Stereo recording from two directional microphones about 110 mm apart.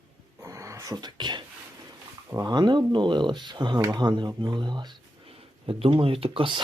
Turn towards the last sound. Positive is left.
turn(degrees=-55)  # may be behind; listen again after turning